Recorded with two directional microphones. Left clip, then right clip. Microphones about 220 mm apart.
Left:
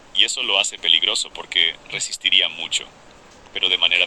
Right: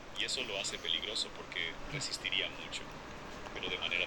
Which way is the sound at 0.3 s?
45° left (ahead or behind).